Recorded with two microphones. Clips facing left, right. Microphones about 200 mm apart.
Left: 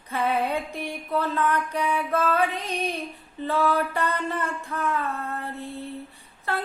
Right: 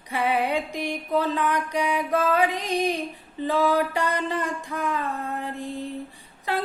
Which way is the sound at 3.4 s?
15° right (ahead or behind).